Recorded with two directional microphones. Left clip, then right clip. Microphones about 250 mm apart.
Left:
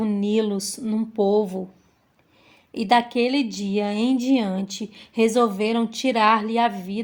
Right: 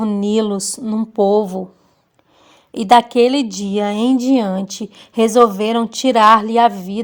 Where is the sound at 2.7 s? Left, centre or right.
Right.